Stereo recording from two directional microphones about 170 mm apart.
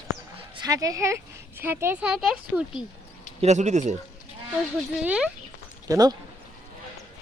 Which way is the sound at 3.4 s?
40° right (ahead or behind).